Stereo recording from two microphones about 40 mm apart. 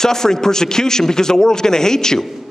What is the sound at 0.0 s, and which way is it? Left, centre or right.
Speech, centre.